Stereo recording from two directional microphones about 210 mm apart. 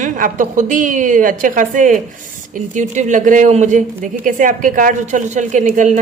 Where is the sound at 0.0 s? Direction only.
35° right (ahead or behind).